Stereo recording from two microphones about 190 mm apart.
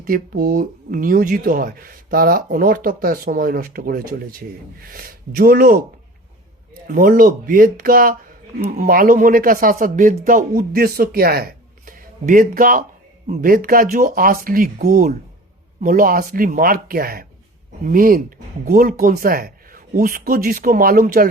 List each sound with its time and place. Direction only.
0.0 s speech: 50° right (ahead or behind)
6.8 s speech: 45° right (ahead or behind)